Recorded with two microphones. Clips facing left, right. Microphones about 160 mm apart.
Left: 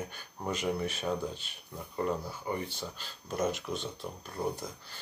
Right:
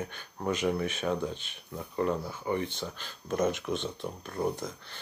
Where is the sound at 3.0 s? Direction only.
50° right (ahead or behind).